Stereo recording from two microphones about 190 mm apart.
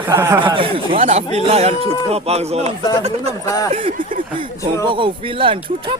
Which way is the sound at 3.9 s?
45° right (ahead or behind).